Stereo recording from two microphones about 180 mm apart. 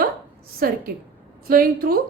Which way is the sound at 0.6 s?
55° right (ahead or behind).